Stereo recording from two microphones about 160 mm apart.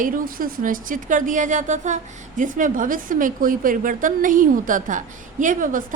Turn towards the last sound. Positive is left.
turn(degrees=-55)  # may be behind; listen again after turning